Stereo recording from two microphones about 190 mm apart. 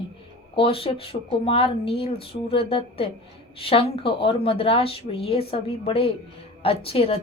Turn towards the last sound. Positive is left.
turn(degrees=30)  # may be behind; listen again after turning